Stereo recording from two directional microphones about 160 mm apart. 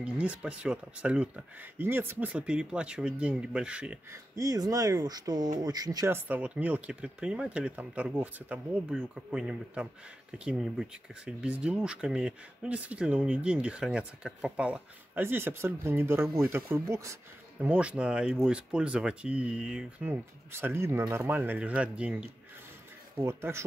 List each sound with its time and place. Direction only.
0.0 s speech: 10° right (ahead or behind)
4.1 s speech: 20° right (ahead or behind)
17.6 s speech: 5° right (ahead or behind)